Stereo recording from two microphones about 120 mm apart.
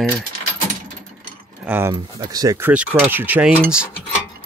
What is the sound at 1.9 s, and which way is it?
Speech, 35° right (ahead or behind).